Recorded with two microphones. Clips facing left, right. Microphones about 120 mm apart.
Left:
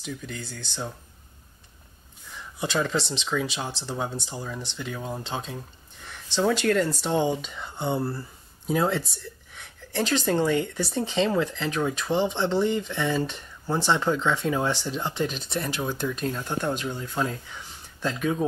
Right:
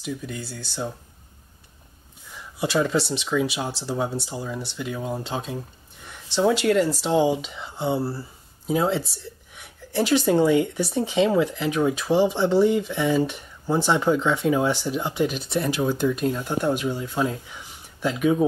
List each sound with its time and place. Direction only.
0.0 s a woman's voice: 10° right (ahead or behind)
2.6 s a woman's voice: 10° right (ahead or behind)
8.6 s a woman's voice: 20° right (ahead or behind)